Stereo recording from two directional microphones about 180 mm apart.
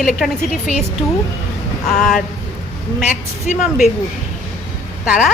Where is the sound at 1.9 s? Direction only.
5° left (ahead or behind).